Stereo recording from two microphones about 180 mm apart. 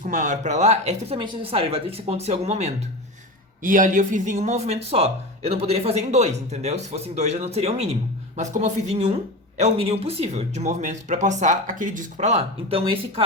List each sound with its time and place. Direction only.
0.0 s speech: 45° right (ahead or behind)
3.6 s speech: 45° right (ahead or behind); by 13.2 s 30° right (ahead or behind)